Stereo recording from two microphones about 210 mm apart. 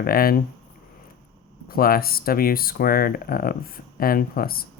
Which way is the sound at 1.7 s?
45° left (ahead or behind).